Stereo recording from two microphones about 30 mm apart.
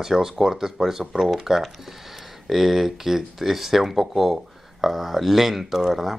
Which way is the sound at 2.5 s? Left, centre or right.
Centre.